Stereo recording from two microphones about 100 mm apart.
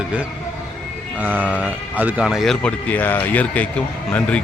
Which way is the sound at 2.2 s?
Centre (ahead or behind).